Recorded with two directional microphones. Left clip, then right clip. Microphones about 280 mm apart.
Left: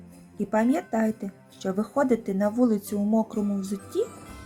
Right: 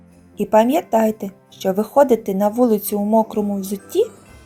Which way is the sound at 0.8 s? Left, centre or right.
Centre.